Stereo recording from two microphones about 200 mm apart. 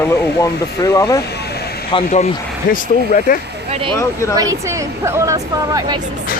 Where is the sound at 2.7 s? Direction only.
45° left (ahead or behind).